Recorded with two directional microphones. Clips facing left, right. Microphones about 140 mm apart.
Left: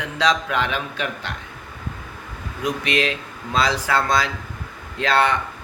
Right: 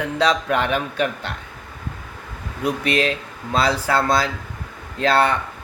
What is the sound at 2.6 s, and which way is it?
Speech, 35° right (ahead or behind).